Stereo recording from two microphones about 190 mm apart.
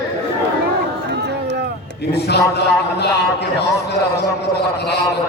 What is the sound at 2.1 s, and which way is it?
A man's voice, 60° left (ahead or behind).